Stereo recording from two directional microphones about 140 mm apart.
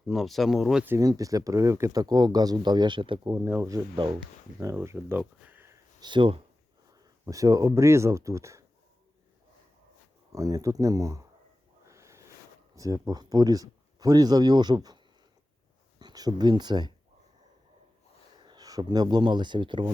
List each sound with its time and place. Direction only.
0.1 s speech: centre (ahead or behind)
0.9 s speech: 25° right (ahead or behind)
3.3 s speech: 20° right (ahead or behind)
3.9 s speech: 40° right (ahead or behind)
4.6 s speech: 20° right (ahead or behind)
5.5 s sniff: 15° right (ahead or behind)
6.0 s speech: 35° right (ahead or behind)
7.3 s speech: 25° right (ahead or behind)
10.3 s speech: 25° right (ahead or behind)
11.9 s a sound: 20° right (ahead or behind)
12.7 s speech: 25° right (ahead or behind)
18.4 s speech: 25° right (ahead or behind)